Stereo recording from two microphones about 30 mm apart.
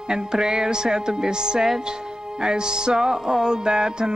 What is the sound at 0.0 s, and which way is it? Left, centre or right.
A woman's voice, right.